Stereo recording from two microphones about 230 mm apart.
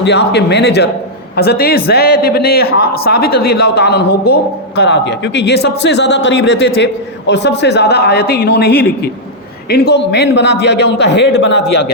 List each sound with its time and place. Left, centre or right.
0.0 s a man's voice: left